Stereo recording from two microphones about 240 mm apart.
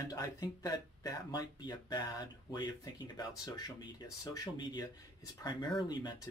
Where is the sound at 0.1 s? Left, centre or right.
Centre.